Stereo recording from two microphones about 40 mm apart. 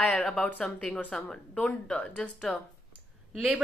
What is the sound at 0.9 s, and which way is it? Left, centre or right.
Speech, left.